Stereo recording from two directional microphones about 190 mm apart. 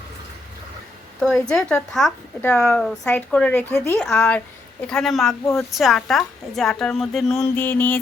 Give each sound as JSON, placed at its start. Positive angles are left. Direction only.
{"t": 1.2, "sound": "a woman's voice", "side_deg": 5}
{"t": 7.3, "sound": "music", "side_deg": 10}